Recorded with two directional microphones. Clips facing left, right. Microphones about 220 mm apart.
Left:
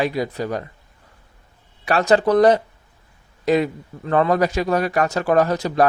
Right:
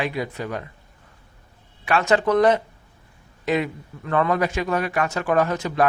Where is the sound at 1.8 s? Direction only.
35° left (ahead or behind).